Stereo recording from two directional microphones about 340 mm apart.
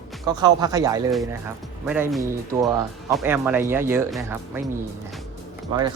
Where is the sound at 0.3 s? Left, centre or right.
Centre.